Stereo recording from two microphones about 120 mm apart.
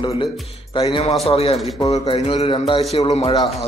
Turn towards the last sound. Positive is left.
turn(degrees=60)  # may be behind; listen again after turning